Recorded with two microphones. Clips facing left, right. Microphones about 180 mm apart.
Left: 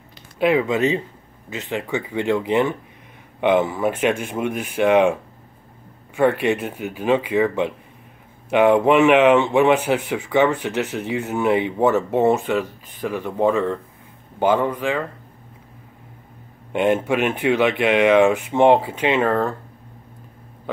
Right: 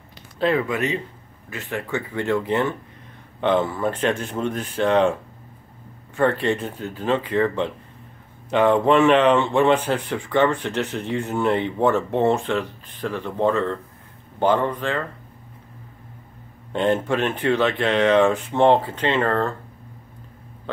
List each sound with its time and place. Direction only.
0.4 s speech: 15° left (ahead or behind)
0.7 s speech: 25° left (ahead or behind)
6.1 s speech: 10° left (ahead or behind)
16.7 s speech: 10° left (ahead or behind)